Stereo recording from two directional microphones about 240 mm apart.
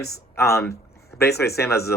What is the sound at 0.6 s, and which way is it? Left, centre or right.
Speech, left.